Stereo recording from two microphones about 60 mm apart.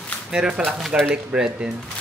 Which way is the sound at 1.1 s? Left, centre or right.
Centre.